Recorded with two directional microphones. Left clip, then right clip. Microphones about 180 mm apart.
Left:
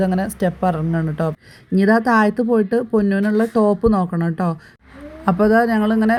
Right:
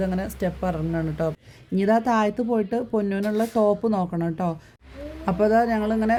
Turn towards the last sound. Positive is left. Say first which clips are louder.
# left 5 dB
turn(degrees=25)  # may be behind; listen again after turning